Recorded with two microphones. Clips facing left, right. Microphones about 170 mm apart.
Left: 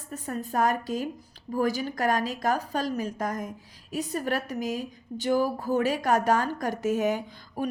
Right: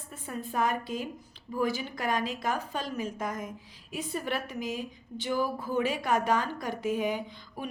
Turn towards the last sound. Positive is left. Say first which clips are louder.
# left 6 dB
turn(degrees=40)  # may be behind; listen again after turning